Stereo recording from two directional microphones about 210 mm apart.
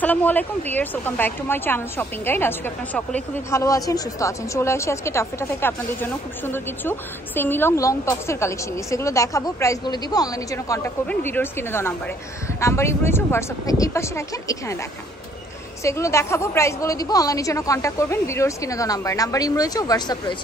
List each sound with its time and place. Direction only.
0.0 s a woman's voice: 5° left (ahead or behind)
15.8 s a woman's voice: 15° left (ahead or behind)